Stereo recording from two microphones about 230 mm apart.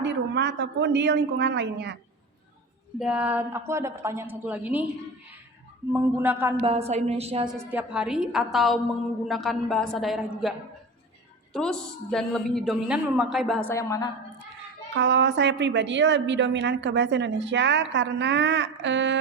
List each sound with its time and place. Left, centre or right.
0.0 s a woman's voice: right
3.0 s a woman's voice: centre
5.9 s a woman's voice: centre
6.6 s a woman's voice: right
7.7 s a woman's voice: centre
11.5 s a woman's voice: centre
14.9 s a woman's voice: right